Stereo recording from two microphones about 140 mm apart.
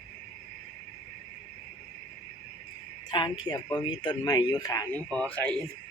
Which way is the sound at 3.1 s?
30° left (ahead or behind).